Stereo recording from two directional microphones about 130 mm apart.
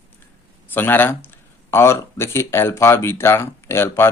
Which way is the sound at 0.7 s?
15° left (ahead or behind).